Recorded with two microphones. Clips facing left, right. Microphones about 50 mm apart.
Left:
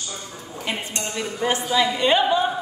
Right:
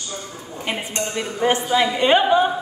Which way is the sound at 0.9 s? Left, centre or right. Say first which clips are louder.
Right 3 dB; right.